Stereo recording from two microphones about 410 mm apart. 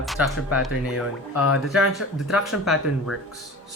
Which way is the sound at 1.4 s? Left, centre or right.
Left.